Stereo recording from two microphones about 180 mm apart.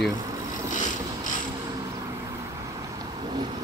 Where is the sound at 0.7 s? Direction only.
45° left (ahead or behind).